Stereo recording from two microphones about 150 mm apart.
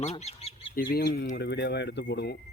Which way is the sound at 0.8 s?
80° left.